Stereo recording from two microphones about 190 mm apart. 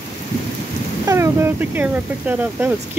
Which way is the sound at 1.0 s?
15° right (ahead or behind).